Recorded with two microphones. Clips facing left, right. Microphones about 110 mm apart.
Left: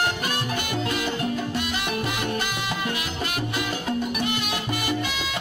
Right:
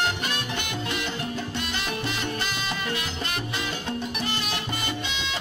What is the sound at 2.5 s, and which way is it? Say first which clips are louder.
Music: left 2 dB; 25° left (ahead or behind).